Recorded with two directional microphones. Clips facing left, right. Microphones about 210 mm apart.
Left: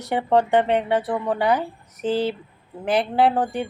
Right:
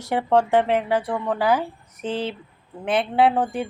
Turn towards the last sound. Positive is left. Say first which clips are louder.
# even
turn(degrees=0)  # may be behind; listen again after turning